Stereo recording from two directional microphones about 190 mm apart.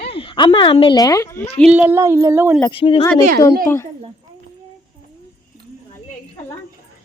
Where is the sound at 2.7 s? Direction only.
30° left (ahead or behind).